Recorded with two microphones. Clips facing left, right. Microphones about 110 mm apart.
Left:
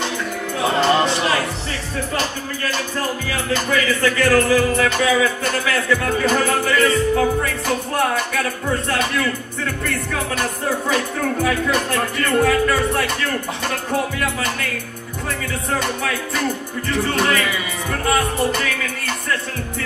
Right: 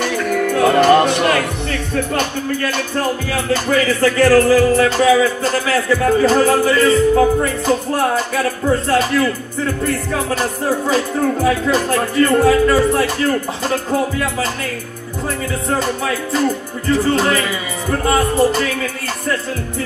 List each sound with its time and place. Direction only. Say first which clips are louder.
0.0 s music: right 7 dB; 65° right (ahead or behind); by 7.7 s 25° right (ahead or behind)
11.4 s speech: right 4 dB; 30° right (ahead or behind)
16.9 s speech: right 4 dB; 30° right (ahead or behind)